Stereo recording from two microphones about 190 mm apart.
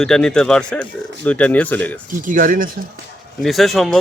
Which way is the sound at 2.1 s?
45° right (ahead or behind).